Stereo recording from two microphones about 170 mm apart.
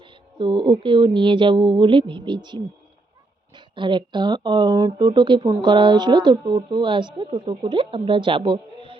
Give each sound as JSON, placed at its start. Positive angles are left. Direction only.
{"t": 0.0, "sound": "speech", "side_deg": -30}